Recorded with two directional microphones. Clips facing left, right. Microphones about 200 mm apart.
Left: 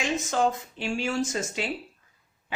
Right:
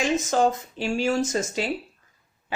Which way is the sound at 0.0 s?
40° right (ahead or behind).